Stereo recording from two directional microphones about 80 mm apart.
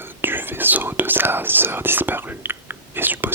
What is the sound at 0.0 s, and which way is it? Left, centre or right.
Speech, right.